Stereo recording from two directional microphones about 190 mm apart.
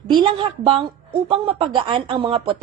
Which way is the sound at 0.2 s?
30° right (ahead or behind).